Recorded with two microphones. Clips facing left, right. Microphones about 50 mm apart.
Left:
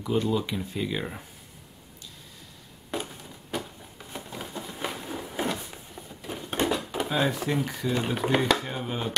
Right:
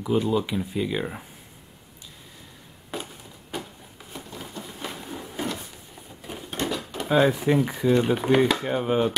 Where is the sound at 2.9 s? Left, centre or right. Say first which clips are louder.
Left 1 dB; centre.